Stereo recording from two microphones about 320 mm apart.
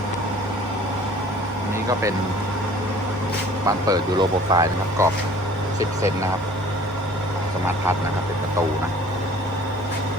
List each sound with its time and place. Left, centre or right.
3.7 s speech: centre